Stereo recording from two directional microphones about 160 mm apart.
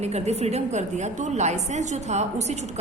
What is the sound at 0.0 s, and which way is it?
A woman's voice, 40° right (ahead or behind).